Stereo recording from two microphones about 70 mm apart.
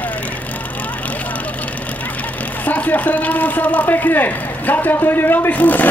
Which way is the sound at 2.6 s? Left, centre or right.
Left.